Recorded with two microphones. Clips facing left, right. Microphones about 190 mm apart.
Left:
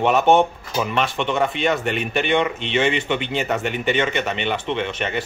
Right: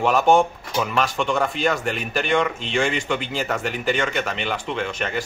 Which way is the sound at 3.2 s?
Centre (ahead or behind).